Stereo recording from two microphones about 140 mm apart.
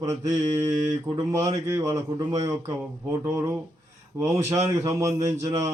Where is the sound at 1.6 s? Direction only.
20° right (ahead or behind).